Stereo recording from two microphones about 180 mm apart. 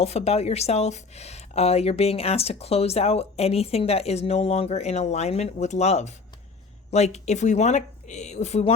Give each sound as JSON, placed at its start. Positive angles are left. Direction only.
{"t": 0.0, "sound": "speech", "side_deg": 35}